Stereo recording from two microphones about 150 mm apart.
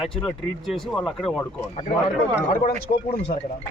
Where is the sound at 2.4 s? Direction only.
55° left (ahead or behind).